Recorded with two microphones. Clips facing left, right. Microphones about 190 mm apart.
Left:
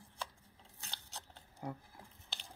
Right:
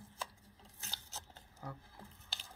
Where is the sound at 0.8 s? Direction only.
5° right (ahead or behind).